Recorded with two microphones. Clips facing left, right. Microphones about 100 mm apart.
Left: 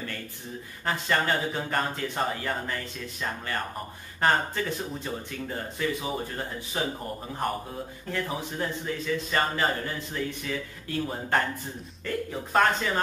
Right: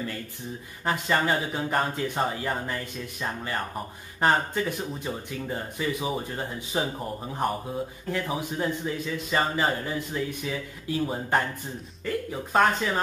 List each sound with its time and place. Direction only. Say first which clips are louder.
0.8 s speech: right 2 dB; 15° right (ahead or behind)
8.1 s speech: right 1 dB; 15° right (ahead or behind)